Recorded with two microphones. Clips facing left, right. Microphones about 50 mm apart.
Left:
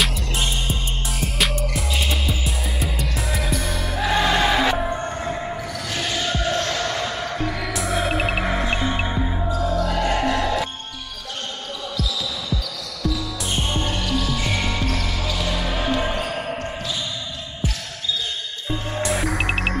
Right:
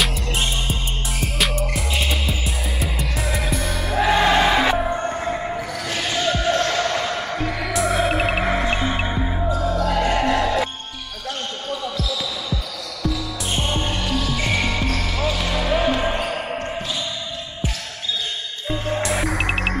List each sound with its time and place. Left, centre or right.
0.0 s music: centre
4.1 s music: centre
7.7 s music: centre
13.0 s music: centre
14.3 s basketball bounce: centre
18.7 s music: centre
19.0 s music: centre